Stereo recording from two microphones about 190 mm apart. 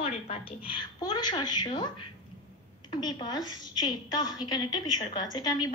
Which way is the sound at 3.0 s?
25° left (ahead or behind).